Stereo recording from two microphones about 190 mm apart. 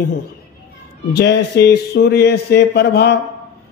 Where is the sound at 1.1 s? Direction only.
60° left (ahead or behind).